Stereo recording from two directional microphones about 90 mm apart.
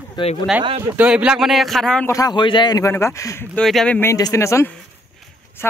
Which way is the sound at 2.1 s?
40° left (ahead or behind).